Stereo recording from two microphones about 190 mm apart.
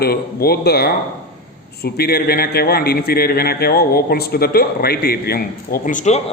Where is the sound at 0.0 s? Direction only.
55° left (ahead or behind).